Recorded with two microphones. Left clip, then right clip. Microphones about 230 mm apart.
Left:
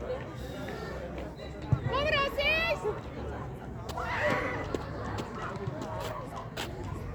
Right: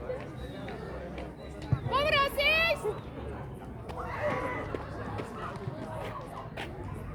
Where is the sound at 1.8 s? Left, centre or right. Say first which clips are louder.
Right 2 dB; right.